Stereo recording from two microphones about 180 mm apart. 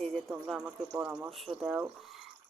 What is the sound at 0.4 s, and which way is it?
Speech, 5° right (ahead or behind).